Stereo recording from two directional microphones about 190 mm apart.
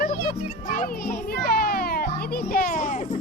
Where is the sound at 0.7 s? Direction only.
50° left (ahead or behind).